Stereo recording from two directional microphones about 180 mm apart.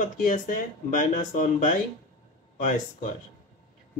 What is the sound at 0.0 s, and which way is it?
Speech, 45° left (ahead or behind).